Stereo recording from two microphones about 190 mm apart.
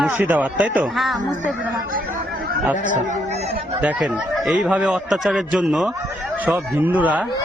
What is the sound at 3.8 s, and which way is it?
A man's voice, 5° right (ahead or behind).